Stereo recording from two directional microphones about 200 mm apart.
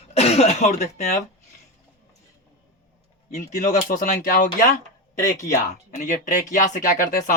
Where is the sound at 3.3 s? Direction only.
35° left (ahead or behind).